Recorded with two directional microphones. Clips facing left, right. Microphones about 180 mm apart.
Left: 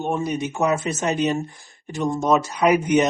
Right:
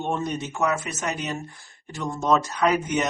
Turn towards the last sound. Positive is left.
turn(degrees=15)  # may be behind; listen again after turning